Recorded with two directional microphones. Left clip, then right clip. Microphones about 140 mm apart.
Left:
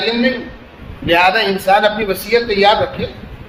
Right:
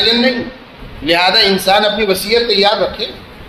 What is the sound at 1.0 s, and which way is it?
A man's voice, 55° right (ahead or behind).